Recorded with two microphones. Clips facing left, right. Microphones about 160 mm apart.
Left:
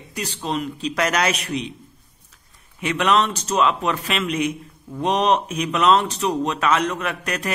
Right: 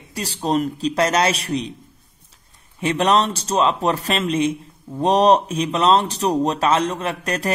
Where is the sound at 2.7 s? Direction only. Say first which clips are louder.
Right 2 dB; 35° right (ahead or behind).